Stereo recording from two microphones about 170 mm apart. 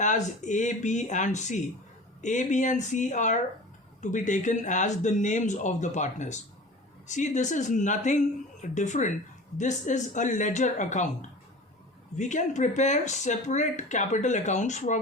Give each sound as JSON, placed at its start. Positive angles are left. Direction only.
{"t": 0.0, "sound": "speech", "side_deg": 45}